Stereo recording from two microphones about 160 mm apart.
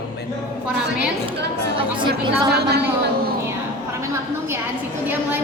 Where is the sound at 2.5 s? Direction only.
90° right.